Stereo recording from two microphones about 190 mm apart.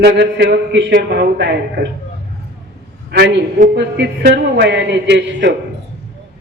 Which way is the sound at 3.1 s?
60° right (ahead or behind).